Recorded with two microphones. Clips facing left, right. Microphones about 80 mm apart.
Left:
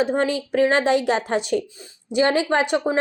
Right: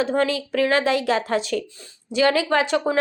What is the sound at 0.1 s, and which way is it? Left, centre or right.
A woman's voice, left.